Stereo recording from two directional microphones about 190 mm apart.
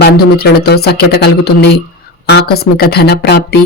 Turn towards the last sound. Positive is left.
turn(degrees=60)  # may be behind; listen again after turning